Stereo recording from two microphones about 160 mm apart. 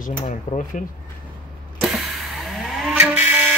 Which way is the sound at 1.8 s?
Centre (ahead or behind).